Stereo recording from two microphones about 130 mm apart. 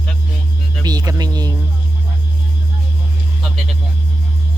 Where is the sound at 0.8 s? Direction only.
30° right (ahead or behind).